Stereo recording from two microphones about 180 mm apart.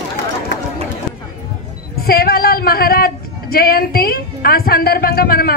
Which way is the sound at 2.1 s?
60° left (ahead or behind).